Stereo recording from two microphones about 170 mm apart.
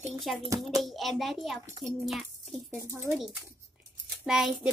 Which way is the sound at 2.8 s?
15° right (ahead or behind).